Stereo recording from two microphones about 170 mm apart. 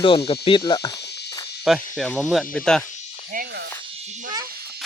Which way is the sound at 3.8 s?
40° right (ahead or behind).